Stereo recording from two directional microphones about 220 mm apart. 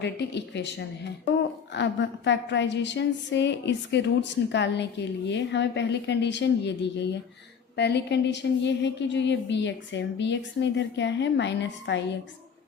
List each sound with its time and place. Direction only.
0.0 s a woman's voice: 50° left (ahead or behind)